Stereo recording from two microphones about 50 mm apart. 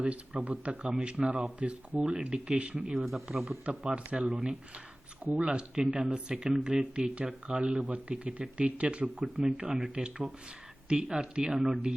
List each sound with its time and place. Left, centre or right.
0.0 s speech: right
1.5 s speech: right
2.9 s speech: centre
3.7 s speech: right